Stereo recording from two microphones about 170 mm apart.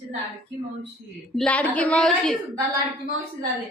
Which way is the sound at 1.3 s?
5° left (ahead or behind).